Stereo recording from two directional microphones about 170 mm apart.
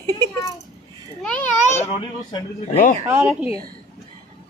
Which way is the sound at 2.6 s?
45° left (ahead or behind).